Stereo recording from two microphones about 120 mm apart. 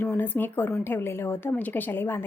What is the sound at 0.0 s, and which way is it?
A woman's voice, 15° left (ahead or behind).